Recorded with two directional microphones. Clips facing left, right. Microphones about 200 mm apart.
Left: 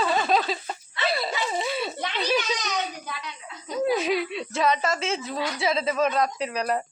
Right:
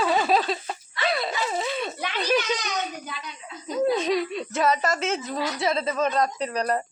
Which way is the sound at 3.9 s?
5° left (ahead or behind).